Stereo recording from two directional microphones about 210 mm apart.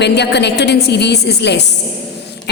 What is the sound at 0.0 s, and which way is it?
A woman's voice, 55° left (ahead or behind).